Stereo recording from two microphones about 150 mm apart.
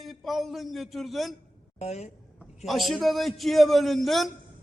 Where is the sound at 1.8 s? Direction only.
45° left (ahead or behind).